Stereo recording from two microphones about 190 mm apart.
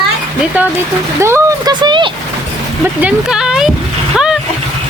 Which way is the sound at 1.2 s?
15° right (ahead or behind).